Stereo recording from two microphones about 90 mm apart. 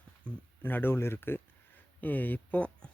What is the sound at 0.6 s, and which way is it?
Speech, 20° left (ahead or behind).